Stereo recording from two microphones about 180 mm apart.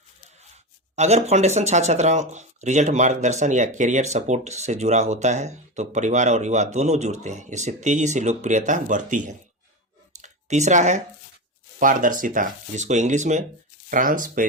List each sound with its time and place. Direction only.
0.9 s speech: 40° right (ahead or behind)
10.2 s a sound: 40° right (ahead or behind)
11.8 s speech: 45° right (ahead or behind)